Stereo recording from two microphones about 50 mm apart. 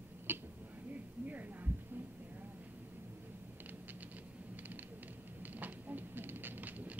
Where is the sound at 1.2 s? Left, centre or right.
Right.